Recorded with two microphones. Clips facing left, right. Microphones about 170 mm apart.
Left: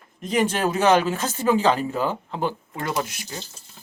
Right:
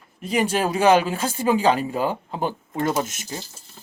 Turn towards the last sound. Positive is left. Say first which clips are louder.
# right 3 dB
turn(degrees=-20)  # may be behind; listen again after turning